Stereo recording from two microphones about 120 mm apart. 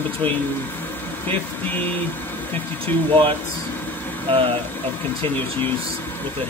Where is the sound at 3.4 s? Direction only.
15° left (ahead or behind).